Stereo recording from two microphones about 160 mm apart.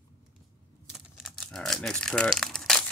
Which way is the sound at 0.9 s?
5° left (ahead or behind).